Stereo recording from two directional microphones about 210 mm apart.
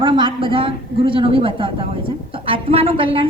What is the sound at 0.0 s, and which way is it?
A woman's voice, 25° right (ahead or behind).